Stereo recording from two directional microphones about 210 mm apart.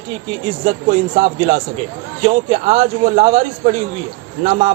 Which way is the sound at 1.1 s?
25° right (ahead or behind).